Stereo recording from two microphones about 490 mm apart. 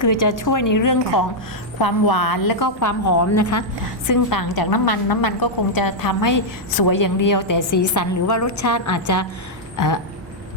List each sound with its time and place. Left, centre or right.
0.0 s a woman's voice: left